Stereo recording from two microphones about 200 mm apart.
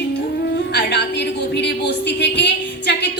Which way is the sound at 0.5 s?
55° left (ahead or behind).